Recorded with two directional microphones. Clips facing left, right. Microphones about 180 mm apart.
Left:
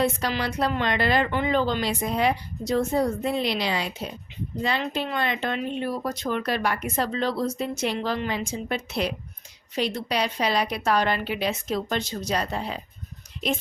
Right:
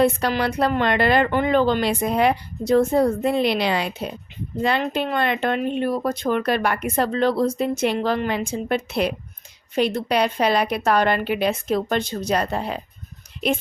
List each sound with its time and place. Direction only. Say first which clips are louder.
0.0 s speech: right 6 dB; 55° right (ahead or behind)